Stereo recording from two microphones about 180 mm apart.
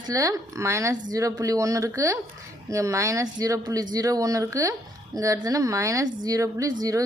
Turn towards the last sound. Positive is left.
turn(degrees=-20)  # may be behind; listen again after turning